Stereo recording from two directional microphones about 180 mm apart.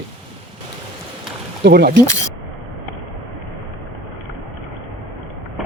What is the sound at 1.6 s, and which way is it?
Speech, 60° right (ahead or behind).